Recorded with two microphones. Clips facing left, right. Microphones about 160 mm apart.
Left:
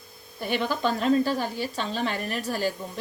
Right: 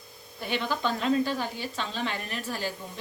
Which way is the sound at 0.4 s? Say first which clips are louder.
Left 3 dB; 45° left (ahead or behind).